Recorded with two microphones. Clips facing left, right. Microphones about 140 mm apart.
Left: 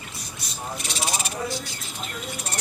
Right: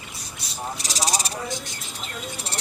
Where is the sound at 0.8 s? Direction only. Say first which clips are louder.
Right 2 dB; 35° right (ahead or behind).